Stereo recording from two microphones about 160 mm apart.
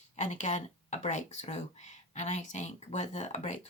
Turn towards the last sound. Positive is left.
turn(degrees=45)  # may be behind; listen again after turning